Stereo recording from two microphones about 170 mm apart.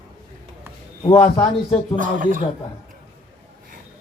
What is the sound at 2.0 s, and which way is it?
Speech, 50° right (ahead or behind).